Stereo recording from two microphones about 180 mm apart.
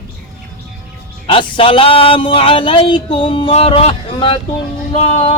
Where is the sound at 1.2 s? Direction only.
30° left (ahead or behind).